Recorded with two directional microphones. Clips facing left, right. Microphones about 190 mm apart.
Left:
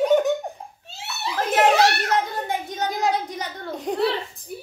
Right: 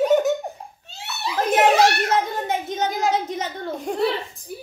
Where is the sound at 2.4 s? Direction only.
20° right (ahead or behind).